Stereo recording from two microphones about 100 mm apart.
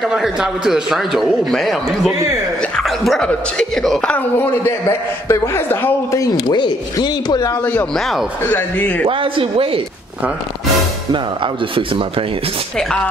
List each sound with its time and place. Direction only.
0.0 s a man's voice: 5° right (ahead or behind)
4.1 s a man's voice: 20° left (ahead or behind)
6.5 s speech: 45° left (ahead or behind)
7.9 s a man's voice: centre (ahead or behind)
8.5 s a man's voice: 15° left (ahead or behind)
9.0 s speech: 60° right (ahead or behind)
11.1 s speech: 55° right (ahead or behind)
12.7 s a man's voice: 10° left (ahead or behind)